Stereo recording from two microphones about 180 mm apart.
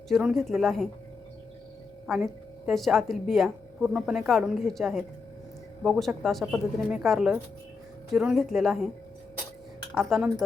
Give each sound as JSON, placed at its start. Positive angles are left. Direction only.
{"t": 0.1, "sound": "speech", "side_deg": 0}
{"t": 2.0, "sound": "speech", "side_deg": 0}
{"t": 9.9, "sound": "speech", "side_deg": 0}